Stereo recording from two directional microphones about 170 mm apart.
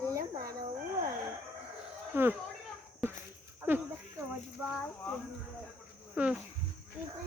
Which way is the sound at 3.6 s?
10° right (ahead or behind).